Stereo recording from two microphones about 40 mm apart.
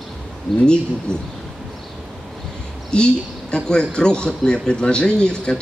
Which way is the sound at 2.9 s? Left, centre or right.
Left.